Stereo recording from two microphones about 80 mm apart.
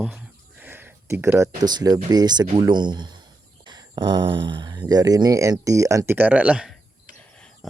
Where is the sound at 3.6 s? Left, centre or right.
Right.